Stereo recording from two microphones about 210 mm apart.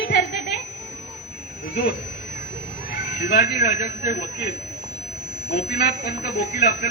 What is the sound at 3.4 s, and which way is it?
Speech, 50° left (ahead or behind).